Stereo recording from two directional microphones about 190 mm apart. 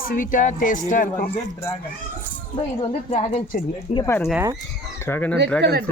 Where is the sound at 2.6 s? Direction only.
35° left (ahead or behind).